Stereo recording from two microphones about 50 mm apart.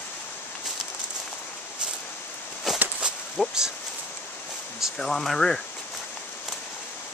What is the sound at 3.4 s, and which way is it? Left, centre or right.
Speech, centre.